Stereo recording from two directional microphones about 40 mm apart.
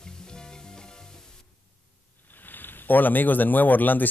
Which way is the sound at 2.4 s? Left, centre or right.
Left.